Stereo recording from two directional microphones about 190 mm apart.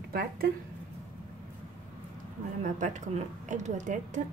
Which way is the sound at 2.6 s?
40° right (ahead or behind).